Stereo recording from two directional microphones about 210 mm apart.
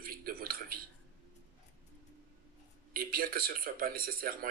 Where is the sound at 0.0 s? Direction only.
45° right (ahead or behind).